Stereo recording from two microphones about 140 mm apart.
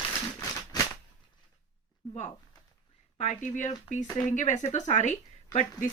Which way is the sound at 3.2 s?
60° left (ahead or behind).